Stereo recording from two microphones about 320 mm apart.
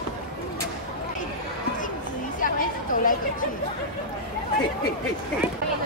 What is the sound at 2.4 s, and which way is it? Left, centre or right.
Chatter, left.